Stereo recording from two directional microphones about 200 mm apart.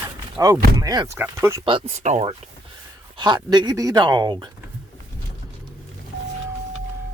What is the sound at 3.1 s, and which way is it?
Speech, 20° right (ahead or behind).